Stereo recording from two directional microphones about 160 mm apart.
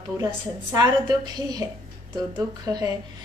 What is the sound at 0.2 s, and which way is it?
A woman's voice, 20° right (ahead or behind).